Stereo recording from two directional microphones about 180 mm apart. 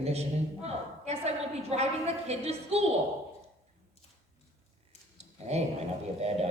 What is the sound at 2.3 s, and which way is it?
Speech, 35° right (ahead or behind).